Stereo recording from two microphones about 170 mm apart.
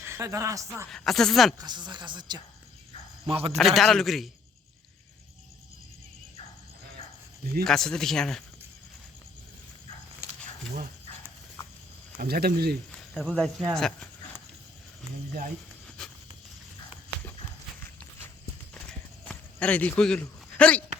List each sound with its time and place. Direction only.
0.0 s speech: 15° right (ahead or behind)
0.9 s a man's voice: centre (ahead or behind)
1.5 s a man's voice: 25° right (ahead or behind)
3.6 s a man's voice: centre (ahead or behind)
7.6 s a man's voice: 5° left (ahead or behind)
12.1 s speech: 65° right (ahead or behind)
13.0 s a man's voice: 5° left (ahead or behind)
16.0 s a sound: 5° left (ahead or behind)
18.7 s clip-clop: 5° left (ahead or behind)